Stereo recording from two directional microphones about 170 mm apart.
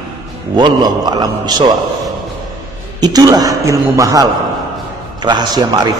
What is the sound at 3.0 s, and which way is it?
A man's voice, 20° right (ahead or behind).